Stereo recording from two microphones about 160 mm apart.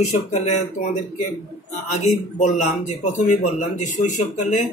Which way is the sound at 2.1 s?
50° left (ahead or behind).